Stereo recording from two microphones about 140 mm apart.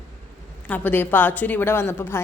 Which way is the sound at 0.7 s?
15° left (ahead or behind).